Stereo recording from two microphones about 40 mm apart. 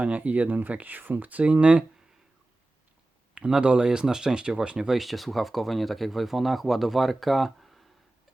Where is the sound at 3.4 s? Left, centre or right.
Right.